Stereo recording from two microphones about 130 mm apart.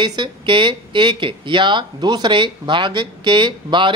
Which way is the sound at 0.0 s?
35° right (ahead or behind).